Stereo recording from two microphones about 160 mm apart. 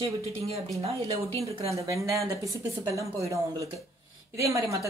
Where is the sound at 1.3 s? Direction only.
40° right (ahead or behind).